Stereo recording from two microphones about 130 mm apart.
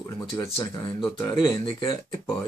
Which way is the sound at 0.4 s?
20° left (ahead or behind).